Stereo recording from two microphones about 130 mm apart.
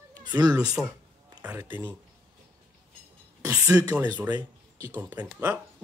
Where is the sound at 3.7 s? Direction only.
25° right (ahead or behind).